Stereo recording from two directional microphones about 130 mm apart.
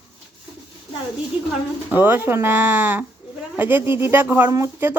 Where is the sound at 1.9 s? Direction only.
15° right (ahead or behind).